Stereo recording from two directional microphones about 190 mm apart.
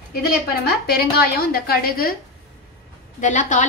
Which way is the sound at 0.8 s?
55° left (ahead or behind).